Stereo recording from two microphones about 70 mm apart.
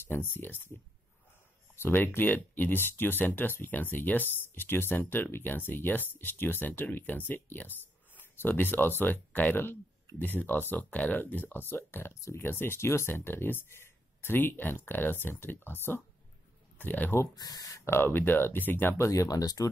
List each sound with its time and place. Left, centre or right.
0.1 s speech: left
1.8 s speech: left
17.4 s speech: left
17.8 s speech: left
18.9 s speech: left
19.2 s speech: left